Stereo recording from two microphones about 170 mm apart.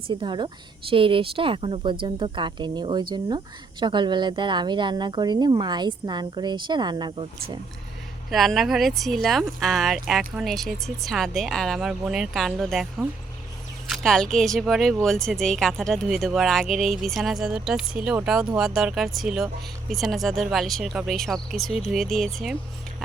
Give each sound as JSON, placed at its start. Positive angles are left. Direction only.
{"t": 0.1, "sound": "speech", "side_deg": -30}
{"t": 8.3, "sound": "speech", "side_deg": 0}